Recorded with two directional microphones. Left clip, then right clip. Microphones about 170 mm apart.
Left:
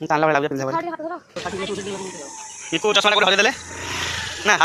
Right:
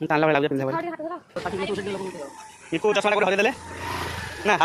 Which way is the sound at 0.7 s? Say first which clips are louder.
Left 3 dB; 20° left (ahead or behind).